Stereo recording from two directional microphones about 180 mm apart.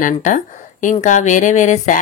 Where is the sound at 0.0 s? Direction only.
45° left (ahead or behind).